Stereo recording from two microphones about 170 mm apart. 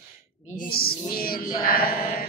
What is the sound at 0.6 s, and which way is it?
Mantra, 60° left (ahead or behind).